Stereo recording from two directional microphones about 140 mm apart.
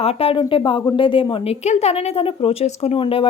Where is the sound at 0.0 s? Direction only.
45° left (ahead or behind).